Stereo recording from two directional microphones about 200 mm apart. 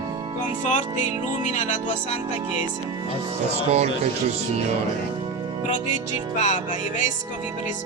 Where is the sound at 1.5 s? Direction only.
40° left (ahead or behind).